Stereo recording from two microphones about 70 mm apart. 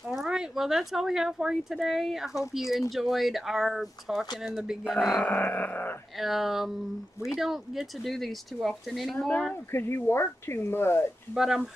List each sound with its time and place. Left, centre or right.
0.3 s speech: centre
5.1 s a sound: left
6.1 s speech: centre
9.3 s speech: centre
9.7 s speech: left
11.3 s speech: centre